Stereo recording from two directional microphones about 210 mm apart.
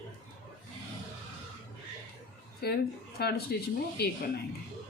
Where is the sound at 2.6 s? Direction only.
50° left (ahead or behind).